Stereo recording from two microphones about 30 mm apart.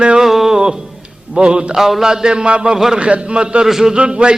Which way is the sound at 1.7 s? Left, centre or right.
Centre.